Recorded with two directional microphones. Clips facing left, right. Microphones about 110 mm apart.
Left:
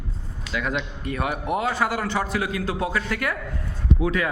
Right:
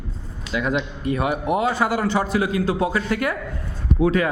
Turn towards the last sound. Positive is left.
turn(degrees=-35)  # may be behind; listen again after turning